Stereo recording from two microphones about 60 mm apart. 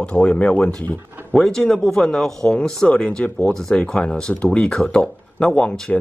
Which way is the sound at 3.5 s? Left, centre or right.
Centre.